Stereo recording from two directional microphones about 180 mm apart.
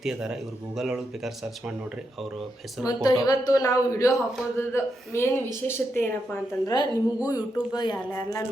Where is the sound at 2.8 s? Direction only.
20° left (ahead or behind).